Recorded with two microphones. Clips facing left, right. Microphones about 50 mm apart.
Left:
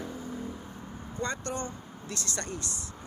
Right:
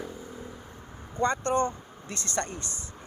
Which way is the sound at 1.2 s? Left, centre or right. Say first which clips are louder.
Right 9 dB; right.